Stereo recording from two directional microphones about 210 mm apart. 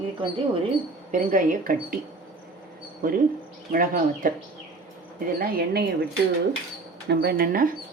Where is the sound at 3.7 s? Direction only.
40° right (ahead or behind).